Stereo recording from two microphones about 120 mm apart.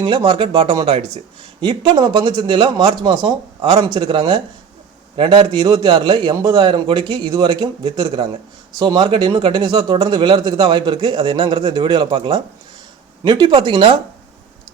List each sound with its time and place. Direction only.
0.0 s a man's voice: 40° right (ahead or behind)